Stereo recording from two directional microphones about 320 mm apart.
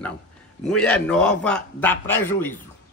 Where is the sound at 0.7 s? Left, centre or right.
Centre.